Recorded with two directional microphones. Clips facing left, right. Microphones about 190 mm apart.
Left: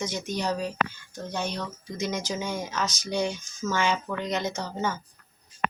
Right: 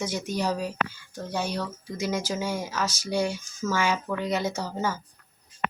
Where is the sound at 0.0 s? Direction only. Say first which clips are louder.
Right 2 dB; 10° right (ahead or behind).